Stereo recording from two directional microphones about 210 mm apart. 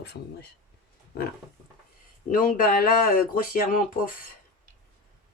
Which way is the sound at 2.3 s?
40° left (ahead or behind).